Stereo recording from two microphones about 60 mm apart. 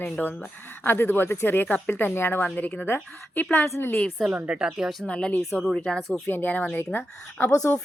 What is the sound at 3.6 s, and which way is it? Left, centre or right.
Speech, left.